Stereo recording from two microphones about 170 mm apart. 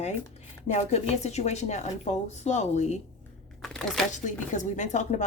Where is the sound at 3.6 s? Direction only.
5° left (ahead or behind).